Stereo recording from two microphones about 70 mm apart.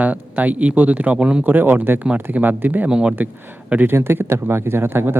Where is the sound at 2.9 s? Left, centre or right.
Centre.